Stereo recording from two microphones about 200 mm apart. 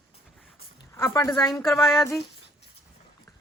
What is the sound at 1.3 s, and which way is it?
Speech, centre (ahead or behind).